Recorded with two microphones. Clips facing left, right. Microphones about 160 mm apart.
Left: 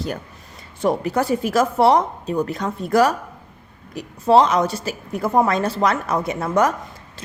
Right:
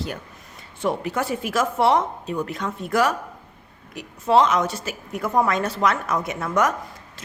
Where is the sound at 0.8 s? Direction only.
40° left (ahead or behind).